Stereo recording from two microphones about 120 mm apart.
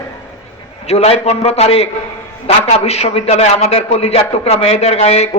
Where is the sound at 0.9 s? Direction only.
60° left (ahead or behind).